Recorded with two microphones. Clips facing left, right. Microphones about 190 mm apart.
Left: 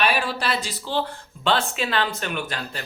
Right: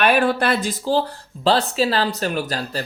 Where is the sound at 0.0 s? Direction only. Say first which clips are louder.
Right 6 dB; 55° right (ahead or behind).